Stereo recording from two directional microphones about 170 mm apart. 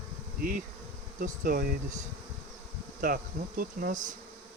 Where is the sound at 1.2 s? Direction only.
55° right (ahead or behind).